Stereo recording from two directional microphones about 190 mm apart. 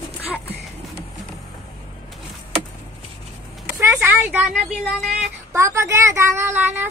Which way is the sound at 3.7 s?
10° right (ahead or behind).